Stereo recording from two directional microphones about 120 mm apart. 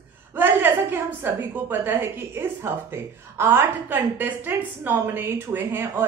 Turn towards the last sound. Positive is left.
turn(degrees=-20)  # may be behind; listen again after turning